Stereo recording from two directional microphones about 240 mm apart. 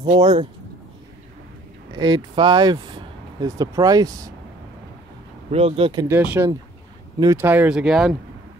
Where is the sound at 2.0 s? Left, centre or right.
Centre.